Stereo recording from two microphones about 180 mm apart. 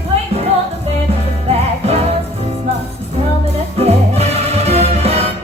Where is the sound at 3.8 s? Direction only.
35° right (ahead or behind).